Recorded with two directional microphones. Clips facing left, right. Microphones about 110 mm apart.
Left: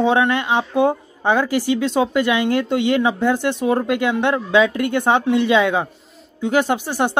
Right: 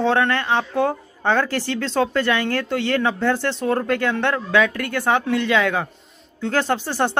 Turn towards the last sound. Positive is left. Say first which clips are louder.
# left 1 dB
turn(degrees=15)  # may be behind; listen again after turning